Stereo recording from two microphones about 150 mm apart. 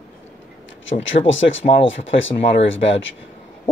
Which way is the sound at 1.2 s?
45° left (ahead or behind).